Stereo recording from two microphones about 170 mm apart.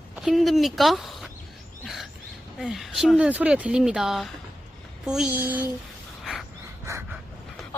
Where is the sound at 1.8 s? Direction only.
Centre (ahead or behind).